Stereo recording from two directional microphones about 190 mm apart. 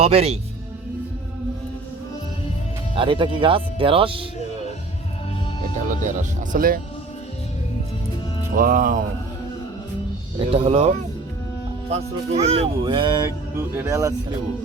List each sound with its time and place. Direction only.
0.0 s speech: 30° right (ahead or behind)
2.9 s speech: 25° right (ahead or behind)
5.9 s speech: 40° right (ahead or behind)
8.5 s speech: 45° right (ahead or behind)
10.5 s speech: 30° right (ahead or behind); by 14.1 s 15° right (ahead or behind)